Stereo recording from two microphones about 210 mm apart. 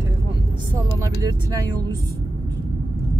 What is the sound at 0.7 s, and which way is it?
Speech, 15° right (ahead or behind).